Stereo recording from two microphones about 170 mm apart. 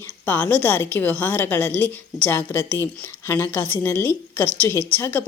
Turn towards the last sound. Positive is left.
turn(degrees=15)  # may be behind; listen again after turning